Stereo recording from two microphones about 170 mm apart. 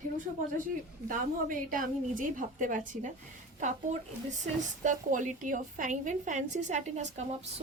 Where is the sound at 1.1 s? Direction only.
55° right (ahead or behind).